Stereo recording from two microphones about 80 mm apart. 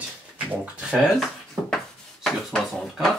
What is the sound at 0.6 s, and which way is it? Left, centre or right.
Speech, centre.